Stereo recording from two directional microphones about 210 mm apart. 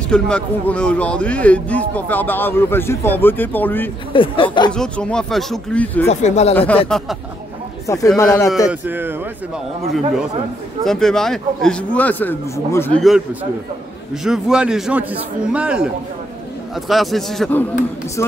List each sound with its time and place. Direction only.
0.1 s a man's voice: 5° left (ahead or behind)
4.1 s speech: 25° left (ahead or behind)
4.7 s a man's voice: 5° left (ahead or behind)
6.0 s speech: 30° left (ahead or behind)
6.9 s a man's voice: centre (ahead or behind)
7.8 s a man's voice: 15° left (ahead or behind)
8.6 s a man's voice: 10° right (ahead or behind)
10.8 s a man's voice: centre (ahead or behind)
13.0 s a man's voice: 5° right (ahead or behind)